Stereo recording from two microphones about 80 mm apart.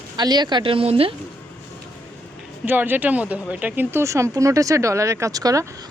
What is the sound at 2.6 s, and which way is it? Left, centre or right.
Speech, right.